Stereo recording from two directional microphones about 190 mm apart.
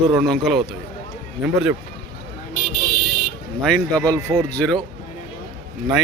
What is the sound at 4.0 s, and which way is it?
Speech, 20° right (ahead or behind).